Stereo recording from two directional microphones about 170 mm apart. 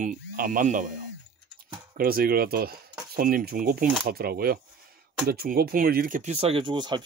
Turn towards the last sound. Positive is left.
turn(degrees=-25)  # may be behind; listen again after turning